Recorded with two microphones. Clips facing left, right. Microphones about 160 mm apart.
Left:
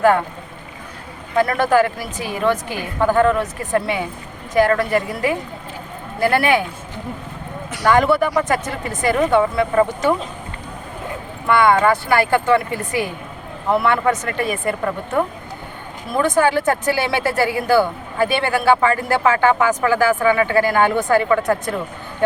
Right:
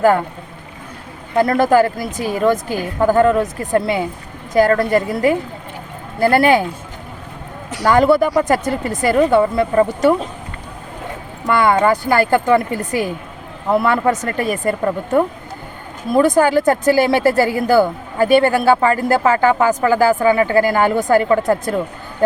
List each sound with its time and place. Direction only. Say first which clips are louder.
1.4 s speech: right 3 dB; 35° right (ahead or behind)
7.7 s speech: right 3 dB; 35° right (ahead or behind)
12.0 s speech: right 2 dB; 40° right (ahead or behind)